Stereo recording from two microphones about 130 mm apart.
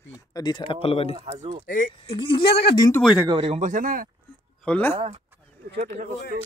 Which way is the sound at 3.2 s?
40° right (ahead or behind).